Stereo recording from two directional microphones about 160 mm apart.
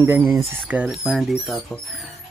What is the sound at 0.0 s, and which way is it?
Speech, 15° right (ahead or behind).